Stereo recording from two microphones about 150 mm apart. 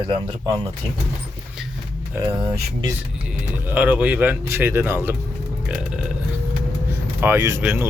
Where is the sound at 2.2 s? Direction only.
15° right (ahead or behind).